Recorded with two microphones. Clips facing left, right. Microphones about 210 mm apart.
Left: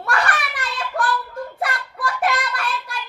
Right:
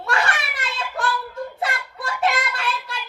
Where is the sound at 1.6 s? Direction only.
25° right (ahead or behind).